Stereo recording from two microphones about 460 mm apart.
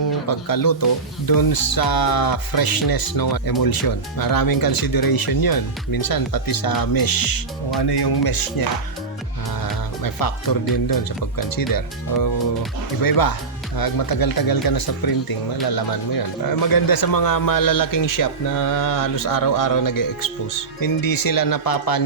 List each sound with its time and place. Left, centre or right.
0.3 s speech: left
10.0 s speech: left
13.0 s speech: left